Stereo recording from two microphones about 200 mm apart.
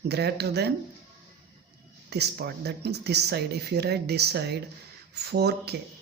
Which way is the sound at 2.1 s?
55° right (ahead or behind).